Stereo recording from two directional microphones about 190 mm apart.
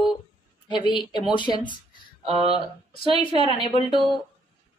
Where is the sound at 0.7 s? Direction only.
25° left (ahead or behind).